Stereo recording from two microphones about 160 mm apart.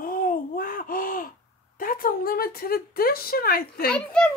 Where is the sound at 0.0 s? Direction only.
60° left (ahead or behind).